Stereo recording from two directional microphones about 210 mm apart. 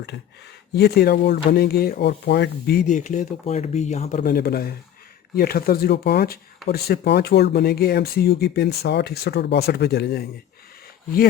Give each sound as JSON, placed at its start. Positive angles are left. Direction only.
{"t": 0.7, "sound": "speech", "side_deg": 50}
{"t": 4.2, "sound": "speech", "side_deg": 45}